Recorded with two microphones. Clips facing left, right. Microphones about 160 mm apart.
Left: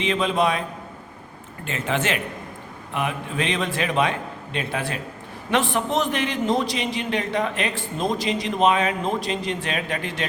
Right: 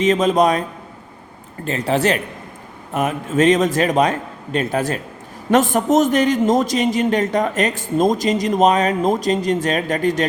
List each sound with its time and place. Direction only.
0.0 s a man's voice: 40° right (ahead or behind)
1.6 s a man's voice: 35° right (ahead or behind)